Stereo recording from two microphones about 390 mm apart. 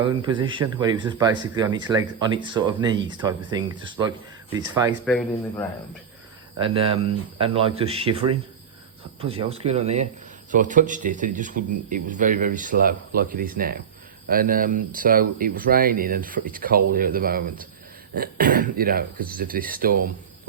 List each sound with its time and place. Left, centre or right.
0.0 s a man's voice: centre
5.0 s speech: centre
6.6 s a man's voice: centre
9.2 s a man's voice: centre